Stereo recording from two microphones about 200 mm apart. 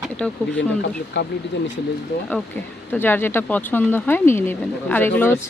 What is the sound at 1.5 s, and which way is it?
Speech, 60° left (ahead or behind).